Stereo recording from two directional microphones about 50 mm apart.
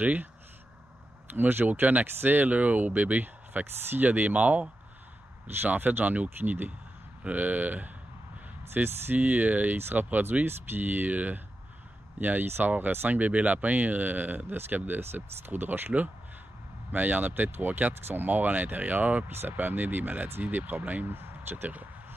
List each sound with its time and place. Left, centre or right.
0.0 s speech: right
1.3 s speech: right
5.7 s speech: right
15.0 s speech: right
16.9 s speech: right
21.1 s speech: right